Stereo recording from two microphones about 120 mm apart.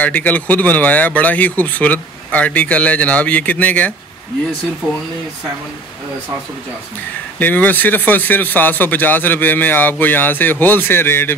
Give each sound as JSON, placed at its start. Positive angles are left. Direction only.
{"t": 0.0, "sound": "speech", "side_deg": 15}
{"t": 7.3, "sound": "speech", "side_deg": 15}